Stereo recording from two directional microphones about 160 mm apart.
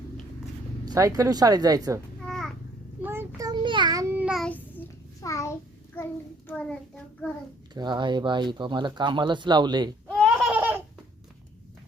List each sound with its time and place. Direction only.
0.9 s speech: 20° right (ahead or behind)
2.2 s babbling: centre (ahead or behind)
3.0 s child singing: 15° right (ahead or behind)
4.1 s child singing: 5° right (ahead or behind)
4.4 s child singing: 10° left (ahead or behind)
6.0 s a child's voice: 10° left (ahead or behind)
7.7 s speech: 30° right (ahead or behind)
10.1 s laughter: centre (ahead or behind)